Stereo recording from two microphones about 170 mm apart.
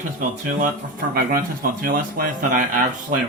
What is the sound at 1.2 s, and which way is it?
Music, 55° right (ahead or behind).